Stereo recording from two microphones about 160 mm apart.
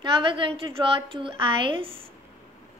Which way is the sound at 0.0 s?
30° right (ahead or behind).